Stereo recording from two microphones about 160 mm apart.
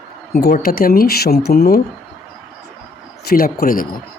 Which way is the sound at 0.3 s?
70° left (ahead or behind).